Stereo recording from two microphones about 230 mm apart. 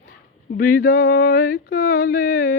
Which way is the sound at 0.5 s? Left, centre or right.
Left.